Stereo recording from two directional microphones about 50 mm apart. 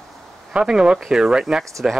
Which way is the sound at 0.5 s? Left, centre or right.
Centre.